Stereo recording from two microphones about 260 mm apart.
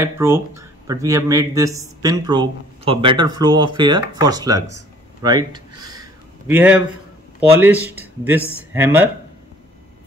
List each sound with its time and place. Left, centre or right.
0.0 s speech: centre
5.2 s a sound: centre
7.3 s speech: centre